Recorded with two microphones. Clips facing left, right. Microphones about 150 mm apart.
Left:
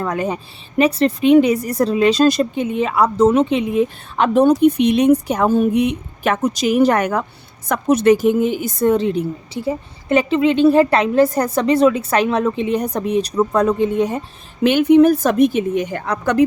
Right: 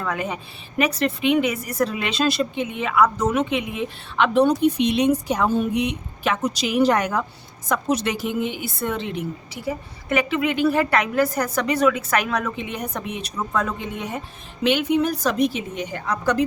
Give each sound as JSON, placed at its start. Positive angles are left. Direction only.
{"t": 0.0, "sound": "a woman's voice", "side_deg": 35}
{"t": 14.6, "sound": "a woman's voice", "side_deg": 50}